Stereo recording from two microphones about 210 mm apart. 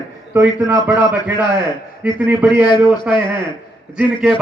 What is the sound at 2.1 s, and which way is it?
A man's voice, 10° right (ahead or behind).